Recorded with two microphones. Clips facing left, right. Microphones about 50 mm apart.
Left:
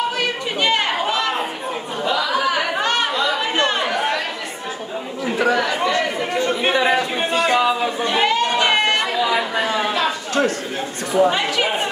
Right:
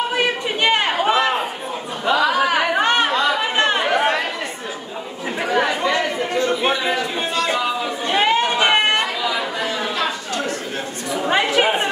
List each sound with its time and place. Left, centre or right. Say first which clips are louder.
0.2 s chatter: right 2 dB; centre
2.0 s a sound: right 3 dB; right
2.7 s chatter: right 3 dB; right
7.2 s music: left 3 dB; left
8.1 s chatter: right 2 dB; right
11.2 s chatter: right 2 dB; right